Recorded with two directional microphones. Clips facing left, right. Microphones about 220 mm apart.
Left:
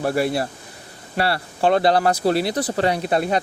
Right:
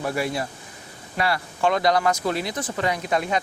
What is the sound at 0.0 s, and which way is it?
Speech, 35° left (ahead or behind).